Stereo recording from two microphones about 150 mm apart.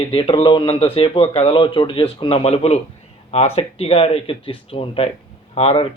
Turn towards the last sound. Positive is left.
turn(degrees=40)  # may be behind; listen again after turning